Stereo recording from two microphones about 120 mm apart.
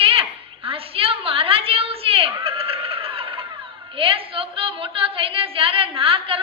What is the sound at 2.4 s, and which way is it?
Neigh, 50° right (ahead or behind).